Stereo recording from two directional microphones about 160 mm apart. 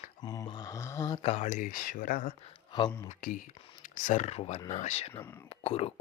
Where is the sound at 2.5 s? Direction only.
30° left (ahead or behind).